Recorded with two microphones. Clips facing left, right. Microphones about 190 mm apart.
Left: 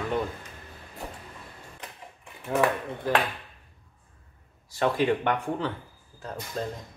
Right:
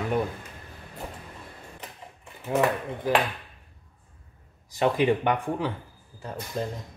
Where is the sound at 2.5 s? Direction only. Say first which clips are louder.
Right 1 dB; 15° right (ahead or behind).